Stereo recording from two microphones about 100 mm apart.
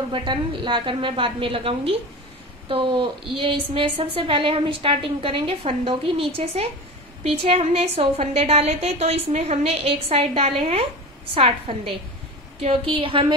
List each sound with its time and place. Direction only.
0.1 s a woman's voice: 55° right (ahead or behind); by 10.9 s 85° right
11.3 s a woman's voice: 70° right (ahead or behind)